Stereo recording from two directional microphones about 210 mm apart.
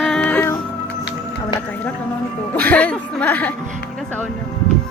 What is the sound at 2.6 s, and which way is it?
Music, 5° left (ahead or behind).